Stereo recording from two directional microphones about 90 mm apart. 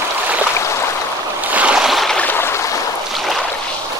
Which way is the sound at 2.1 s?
20° left (ahead or behind).